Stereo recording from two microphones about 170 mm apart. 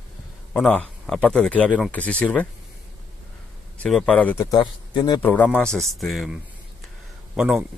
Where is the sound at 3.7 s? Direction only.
5° left (ahead or behind).